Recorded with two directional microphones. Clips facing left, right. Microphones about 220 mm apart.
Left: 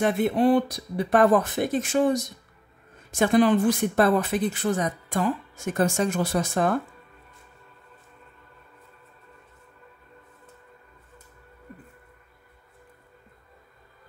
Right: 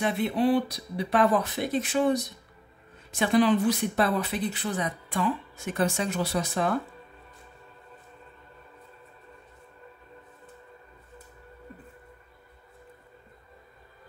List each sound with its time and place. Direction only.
0.0 s speech: 45° left (ahead or behind)